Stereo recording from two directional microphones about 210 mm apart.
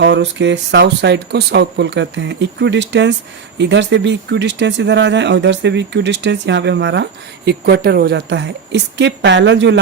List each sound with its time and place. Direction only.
0.0 s speech: 60° right (ahead or behind)